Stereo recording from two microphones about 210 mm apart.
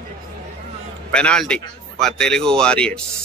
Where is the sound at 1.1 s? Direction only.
5° left (ahead or behind).